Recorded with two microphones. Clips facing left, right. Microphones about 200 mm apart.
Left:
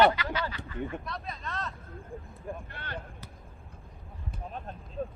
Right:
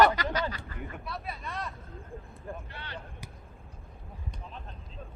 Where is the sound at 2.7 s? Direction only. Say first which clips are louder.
Left 2 dB; 50° left (ahead or behind).